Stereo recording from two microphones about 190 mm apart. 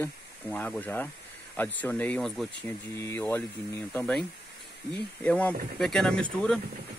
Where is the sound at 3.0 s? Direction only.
15° left (ahead or behind).